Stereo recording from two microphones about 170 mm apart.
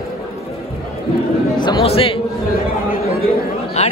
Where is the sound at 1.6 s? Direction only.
30° left (ahead or behind).